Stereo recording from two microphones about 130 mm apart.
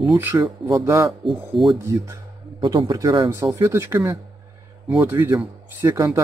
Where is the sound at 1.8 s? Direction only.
20° right (ahead or behind).